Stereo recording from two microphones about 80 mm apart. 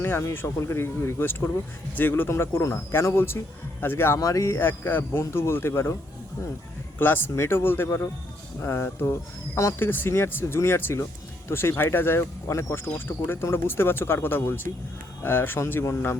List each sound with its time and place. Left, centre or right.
0.0 s a man's voice: left
4.2 s a man's voice: left
7.0 s a man's voice: left
9.8 s speech: left